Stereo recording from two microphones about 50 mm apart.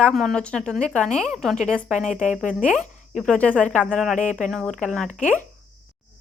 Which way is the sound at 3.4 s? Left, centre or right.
Left.